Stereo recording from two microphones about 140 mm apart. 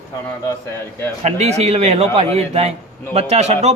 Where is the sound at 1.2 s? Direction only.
50° right (ahead or behind).